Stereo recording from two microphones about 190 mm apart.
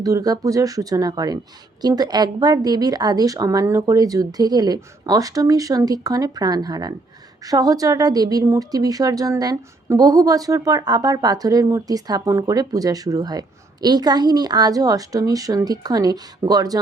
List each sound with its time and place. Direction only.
0.0 s a woman's voice: 20° right (ahead or behind)